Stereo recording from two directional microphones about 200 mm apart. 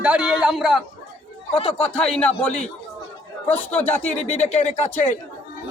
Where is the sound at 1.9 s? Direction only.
5° left (ahead or behind).